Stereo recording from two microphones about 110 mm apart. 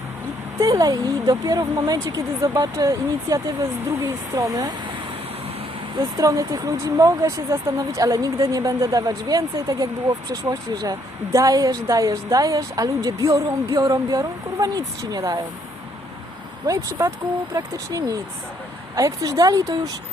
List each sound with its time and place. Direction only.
0.6 s speech: 35° right (ahead or behind)
6.0 s speech: 30° right (ahead or behind)
16.6 s speech: 30° right (ahead or behind)